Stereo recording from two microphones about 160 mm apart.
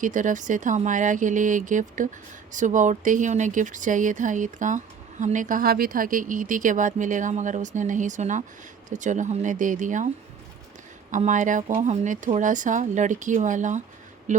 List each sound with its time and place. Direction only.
0.0 s speech: 50° right (ahead or behind)
11.1 s speech: 50° right (ahead or behind)